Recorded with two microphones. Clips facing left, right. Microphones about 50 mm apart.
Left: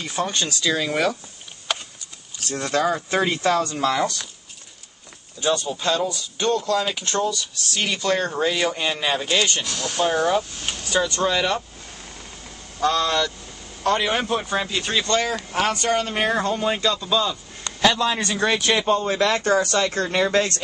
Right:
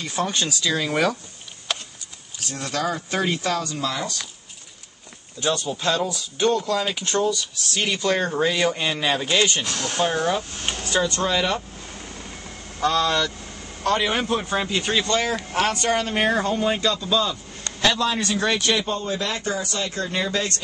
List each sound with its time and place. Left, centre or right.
0.0 s speech: centre
2.5 s speech: left
3.6 s speech: left
5.7 s speech: centre
10.1 s speech: centre
12.8 s speech: centre
18.8 s speech: left
19.1 s speech: left